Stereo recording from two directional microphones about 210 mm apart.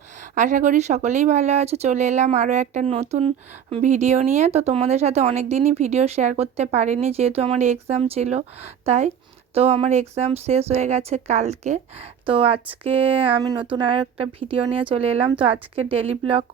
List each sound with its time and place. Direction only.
0.2 s a woman's voice: 35° right (ahead or behind)